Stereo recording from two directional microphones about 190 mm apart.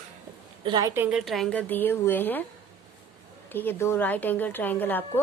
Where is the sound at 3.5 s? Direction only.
10° left (ahead or behind).